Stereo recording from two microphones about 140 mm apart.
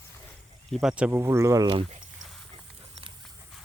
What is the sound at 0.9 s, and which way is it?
Speech, 10° right (ahead or behind).